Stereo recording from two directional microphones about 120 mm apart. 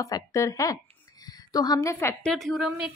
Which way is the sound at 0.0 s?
25° left (ahead or behind).